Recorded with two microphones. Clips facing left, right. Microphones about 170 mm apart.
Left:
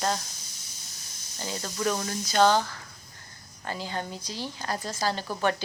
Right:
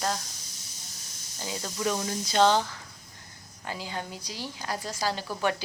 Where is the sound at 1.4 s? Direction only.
10° right (ahead or behind).